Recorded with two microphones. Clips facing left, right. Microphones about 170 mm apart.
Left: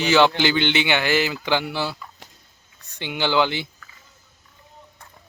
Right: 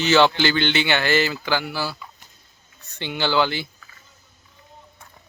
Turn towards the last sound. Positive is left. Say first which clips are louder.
# even
turn(degrees=20)  # may be behind; listen again after turning